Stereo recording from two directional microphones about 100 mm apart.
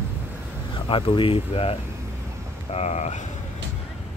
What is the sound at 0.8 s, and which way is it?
Speech, 60° left (ahead or behind).